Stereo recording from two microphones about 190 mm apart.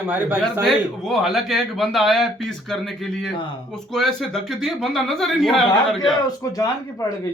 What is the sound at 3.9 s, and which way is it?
Speech, centre (ahead or behind).